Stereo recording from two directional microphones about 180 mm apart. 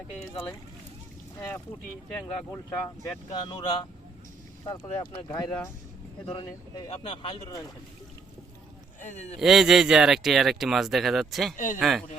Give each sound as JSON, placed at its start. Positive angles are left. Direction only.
{"t": 1.4, "sound": "speech", "side_deg": 15}
{"t": 3.4, "sound": "speech", "side_deg": 25}
{"t": 9.0, "sound": "speech", "side_deg": 40}
{"t": 9.4, "sound": "speech", "side_deg": 0}
{"t": 11.5, "sound": "speech", "side_deg": 45}
{"t": 11.8, "sound": "speech", "side_deg": 0}